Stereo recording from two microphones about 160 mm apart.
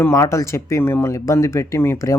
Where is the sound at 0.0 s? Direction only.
15° left (ahead or behind).